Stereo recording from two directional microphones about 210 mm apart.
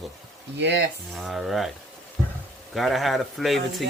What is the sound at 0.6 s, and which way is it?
Speech, 55° right (ahead or behind).